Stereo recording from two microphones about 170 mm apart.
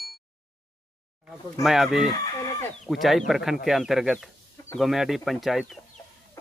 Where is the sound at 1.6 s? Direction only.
Centre (ahead or behind).